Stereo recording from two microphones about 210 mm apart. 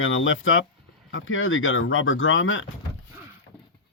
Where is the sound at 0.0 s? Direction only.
70° left (ahead or behind).